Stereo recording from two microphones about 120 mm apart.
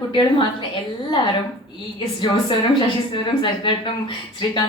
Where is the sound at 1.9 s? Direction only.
40° left (ahead or behind).